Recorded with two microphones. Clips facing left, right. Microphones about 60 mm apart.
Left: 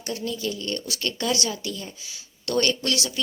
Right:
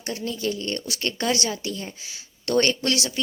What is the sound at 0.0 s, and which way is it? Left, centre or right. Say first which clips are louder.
Speech: right 1 dB; right.